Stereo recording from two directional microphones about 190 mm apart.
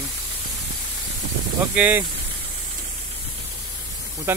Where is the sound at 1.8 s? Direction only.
10° right (ahead or behind).